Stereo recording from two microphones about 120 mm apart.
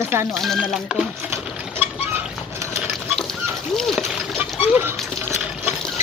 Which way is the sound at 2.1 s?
25° right (ahead or behind).